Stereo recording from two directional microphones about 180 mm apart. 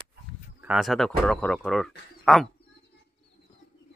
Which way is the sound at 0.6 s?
5° right (ahead or behind).